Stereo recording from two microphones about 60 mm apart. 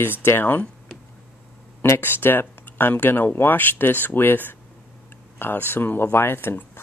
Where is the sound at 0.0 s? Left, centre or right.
Left.